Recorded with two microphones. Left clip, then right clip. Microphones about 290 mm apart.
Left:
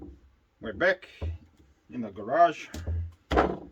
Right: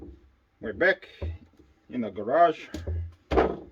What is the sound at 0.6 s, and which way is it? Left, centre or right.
Speech, left.